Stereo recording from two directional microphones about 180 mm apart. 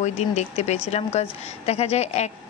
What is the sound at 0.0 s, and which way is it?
Speech, 40° left (ahead or behind).